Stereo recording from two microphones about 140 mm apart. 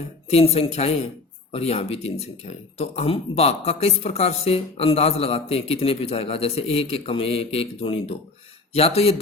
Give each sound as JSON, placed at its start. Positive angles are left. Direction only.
{"t": 0.3, "sound": "speech", "side_deg": 45}